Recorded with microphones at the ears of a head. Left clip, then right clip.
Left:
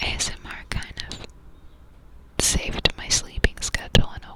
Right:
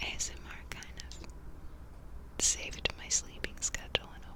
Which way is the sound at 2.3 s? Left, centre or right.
Left.